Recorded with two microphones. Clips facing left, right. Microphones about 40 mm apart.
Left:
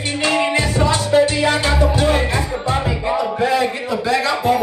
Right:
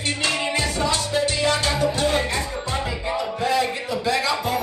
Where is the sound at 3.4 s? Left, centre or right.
Centre.